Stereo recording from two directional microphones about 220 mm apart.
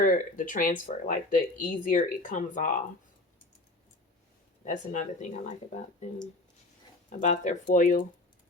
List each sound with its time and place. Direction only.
0.0 s speech: 40° left (ahead or behind)
4.6 s speech: 35° left (ahead or behind)
7.1 s speech: 35° left (ahead or behind)